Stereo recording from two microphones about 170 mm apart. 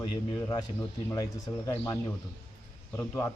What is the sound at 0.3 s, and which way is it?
A man's voice, 15° left (ahead or behind).